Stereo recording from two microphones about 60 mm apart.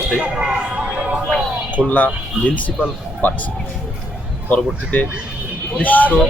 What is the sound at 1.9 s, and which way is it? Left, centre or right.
Speech, left.